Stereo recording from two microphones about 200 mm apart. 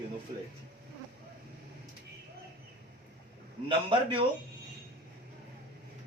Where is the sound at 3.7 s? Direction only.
25° right (ahead or behind).